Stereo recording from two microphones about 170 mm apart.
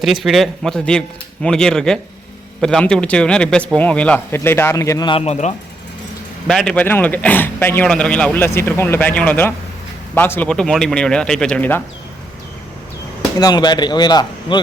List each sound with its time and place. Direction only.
0.0 s a man's voice: centre (ahead or behind); by 5.5 s 40° left (ahead or behind)
6.5 s a man's voice: 5° left (ahead or behind)
13.4 s a man's voice: 25° left (ahead or behind)